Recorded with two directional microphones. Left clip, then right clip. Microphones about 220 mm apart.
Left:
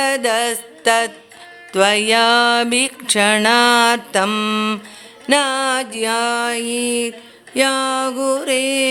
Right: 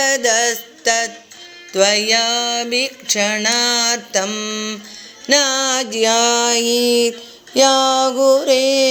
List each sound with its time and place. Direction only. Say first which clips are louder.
0.0 s music: right 1 dB; 10° left (ahead or behind)
5.3 s music: right 1 dB; centre (ahead or behind)